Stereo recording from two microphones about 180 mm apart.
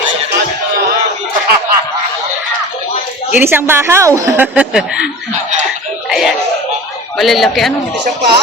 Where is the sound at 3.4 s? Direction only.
10° right (ahead or behind).